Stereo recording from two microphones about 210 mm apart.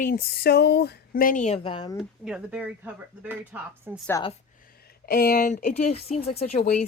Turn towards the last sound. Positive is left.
turn(degrees=35)  # may be behind; listen again after turning